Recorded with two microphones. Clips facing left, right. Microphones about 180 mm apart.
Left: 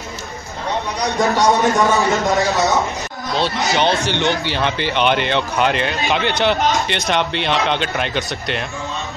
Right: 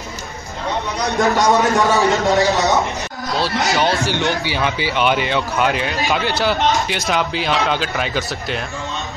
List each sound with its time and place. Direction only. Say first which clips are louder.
1.2 s speech: even; centre (ahead or behind)
3.8 s speech: left 3 dB; 20° left (ahead or behind)
4.5 s speech: even; 10° right (ahead or behind)